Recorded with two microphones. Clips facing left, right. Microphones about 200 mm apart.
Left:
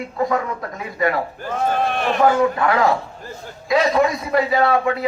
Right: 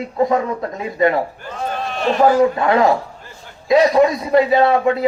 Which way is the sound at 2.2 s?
25° right (ahead or behind).